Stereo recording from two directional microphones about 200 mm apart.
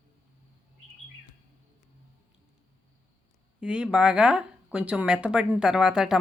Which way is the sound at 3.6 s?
5° right (ahead or behind).